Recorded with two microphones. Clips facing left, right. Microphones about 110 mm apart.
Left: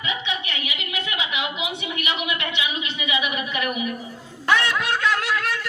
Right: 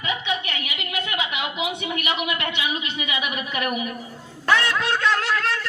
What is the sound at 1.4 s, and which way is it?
A man's voice, 45° right (ahead or behind).